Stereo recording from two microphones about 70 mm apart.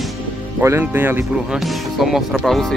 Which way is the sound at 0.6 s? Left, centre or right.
Right.